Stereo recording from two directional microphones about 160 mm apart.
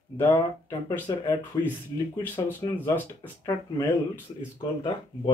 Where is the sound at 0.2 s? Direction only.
15° left (ahead or behind).